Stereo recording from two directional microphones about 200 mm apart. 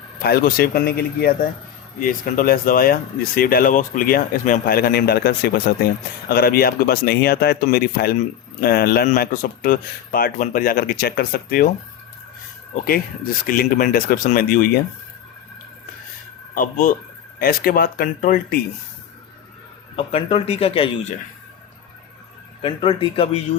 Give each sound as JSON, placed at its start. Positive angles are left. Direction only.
{"t": 0.2, "sound": "speech", "side_deg": 50}
{"t": 12.7, "sound": "speech", "side_deg": 45}
{"t": 16.6, "sound": "speech", "side_deg": 40}
{"t": 20.0, "sound": "speech", "side_deg": 30}
{"t": 22.6, "sound": "speech", "side_deg": 25}